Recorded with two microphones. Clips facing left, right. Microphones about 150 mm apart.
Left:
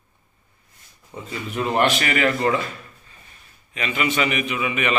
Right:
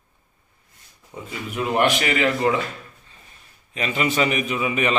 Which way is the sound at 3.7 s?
35° right (ahead or behind).